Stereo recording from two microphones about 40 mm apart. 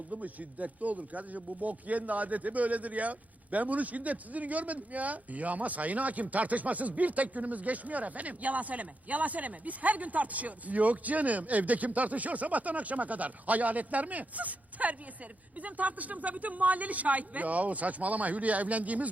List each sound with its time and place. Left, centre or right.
0.1 s speech: right